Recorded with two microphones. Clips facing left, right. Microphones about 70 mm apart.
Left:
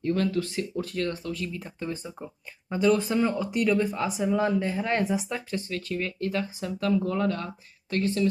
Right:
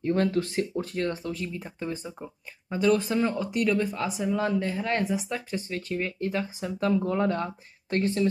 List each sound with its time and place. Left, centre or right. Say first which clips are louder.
0.1 s speech: right 2 dB; right
0.7 s speech: right 1 dB; right; by 5.4 s centre
5.5 s speech: left 1 dB; right